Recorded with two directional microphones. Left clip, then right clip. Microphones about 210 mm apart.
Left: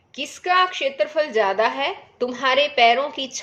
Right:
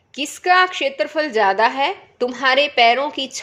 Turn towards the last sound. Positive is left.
turn(degrees=-30)  # may be behind; listen again after turning